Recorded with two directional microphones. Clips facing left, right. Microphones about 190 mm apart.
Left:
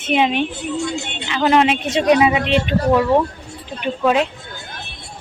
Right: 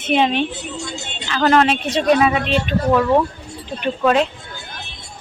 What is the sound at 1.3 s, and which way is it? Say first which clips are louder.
Speech: even; 15° left (ahead or behind).